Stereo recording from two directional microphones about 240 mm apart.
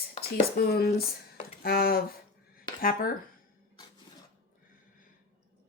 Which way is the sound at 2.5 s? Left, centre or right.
Left.